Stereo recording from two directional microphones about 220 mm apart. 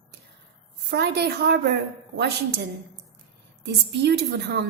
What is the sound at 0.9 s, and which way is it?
Speech, 50° right (ahead or behind).